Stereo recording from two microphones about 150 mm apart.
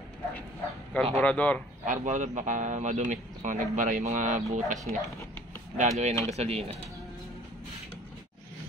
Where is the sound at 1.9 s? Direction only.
55° right (ahead or behind).